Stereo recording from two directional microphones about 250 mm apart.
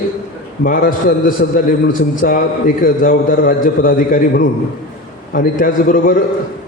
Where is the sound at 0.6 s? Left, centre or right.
Left.